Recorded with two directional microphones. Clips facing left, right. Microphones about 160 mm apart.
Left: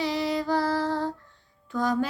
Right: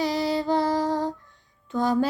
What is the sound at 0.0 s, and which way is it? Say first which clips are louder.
Music: right 2 dB; 40° right (ahead or behind).